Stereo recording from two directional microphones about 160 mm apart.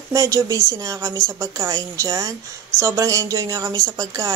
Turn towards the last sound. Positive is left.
turn(degrees=-20)  # may be behind; listen again after turning